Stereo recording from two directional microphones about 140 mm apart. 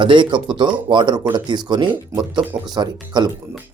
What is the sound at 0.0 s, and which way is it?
Speech, 35° right (ahead or behind).